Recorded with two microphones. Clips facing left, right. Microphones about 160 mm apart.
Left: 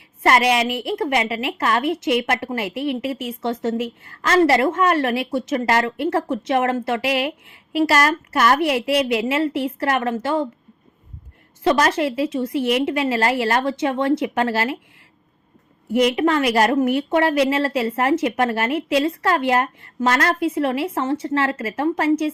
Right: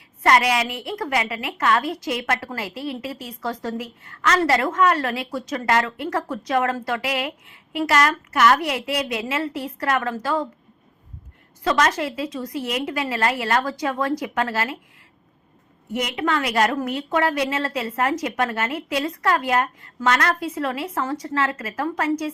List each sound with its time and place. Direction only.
0.2 s a woman's voice: 25° left (ahead or behind)
11.6 s a woman's voice: 30° left (ahead or behind)
15.9 s a woman's voice: 30° left (ahead or behind)